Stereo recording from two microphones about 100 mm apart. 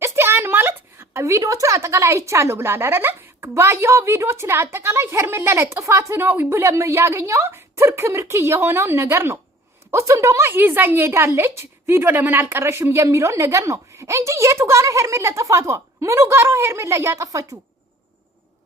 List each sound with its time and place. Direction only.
0.0 s a woman's voice: 25° right (ahead or behind)